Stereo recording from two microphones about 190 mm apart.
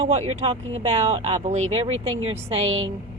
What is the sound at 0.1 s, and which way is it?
A woman's voice, 35° right (ahead or behind).